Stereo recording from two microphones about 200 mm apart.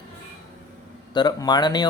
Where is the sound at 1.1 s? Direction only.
20° left (ahead or behind).